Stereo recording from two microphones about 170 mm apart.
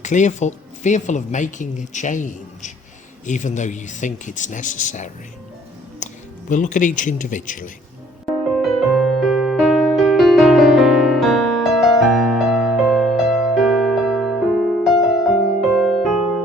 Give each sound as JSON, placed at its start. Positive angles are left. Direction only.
{"t": 0.0, "sound": "speech", "side_deg": 45}
{"t": 6.0, "sound": "music", "side_deg": 45}
{"t": 6.5, "sound": "speech", "side_deg": 50}
{"t": 8.3, "sound": "music", "side_deg": 0}